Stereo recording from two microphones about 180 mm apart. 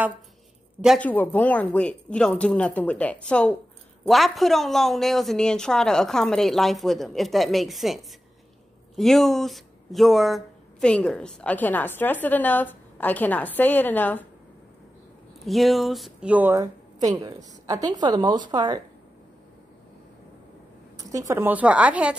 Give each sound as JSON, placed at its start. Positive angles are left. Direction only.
{"t": 0.9, "sound": "a woman's voice", "side_deg": 10}
{"t": 15.4, "sound": "a woman's voice", "side_deg": 0}
{"t": 21.1, "sound": "a woman's voice", "side_deg": -15}